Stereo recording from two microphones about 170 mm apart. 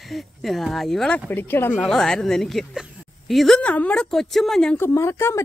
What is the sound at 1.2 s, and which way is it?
Speech, 10° left (ahead or behind).